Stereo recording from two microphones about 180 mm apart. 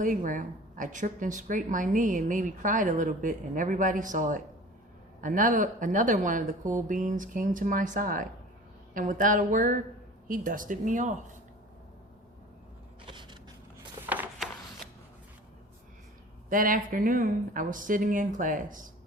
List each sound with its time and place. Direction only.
0.0 s a woman's voice: 45° right (ahead or behind)
14.1 s a sound: 5° right (ahead or behind)
16.5 s a woman's voice: 50° right (ahead or behind)